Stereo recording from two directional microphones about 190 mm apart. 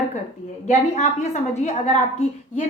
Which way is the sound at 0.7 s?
35° left (ahead or behind).